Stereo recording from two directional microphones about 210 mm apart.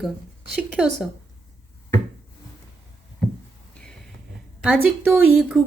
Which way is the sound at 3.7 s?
5° left (ahead or behind).